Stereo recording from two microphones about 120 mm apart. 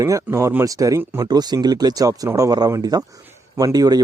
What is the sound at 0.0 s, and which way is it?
Speech, 25° right (ahead or behind).